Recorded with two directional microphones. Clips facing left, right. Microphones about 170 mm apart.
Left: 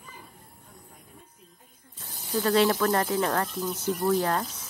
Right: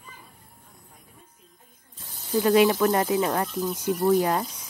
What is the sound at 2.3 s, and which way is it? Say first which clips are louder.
Speech: right 4 dB; 15° right (ahead or behind).